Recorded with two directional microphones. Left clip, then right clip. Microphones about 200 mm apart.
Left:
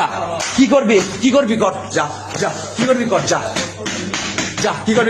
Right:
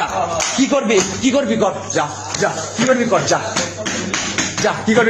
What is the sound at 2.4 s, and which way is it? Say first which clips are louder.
Music: right 1 dB; centre (ahead or behind).